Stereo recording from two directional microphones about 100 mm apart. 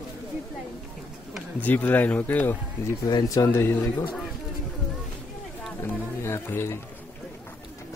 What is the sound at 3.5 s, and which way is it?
Speech, 25° left (ahead or behind).